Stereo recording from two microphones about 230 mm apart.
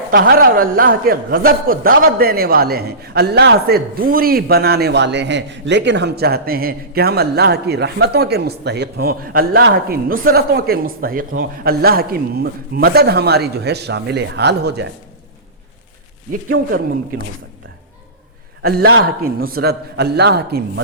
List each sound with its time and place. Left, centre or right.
0.1 s a woman's voice: right
18.6 s a man's voice: right